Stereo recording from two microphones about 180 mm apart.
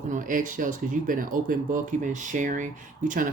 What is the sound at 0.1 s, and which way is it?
Speech, 50° right (ahead or behind).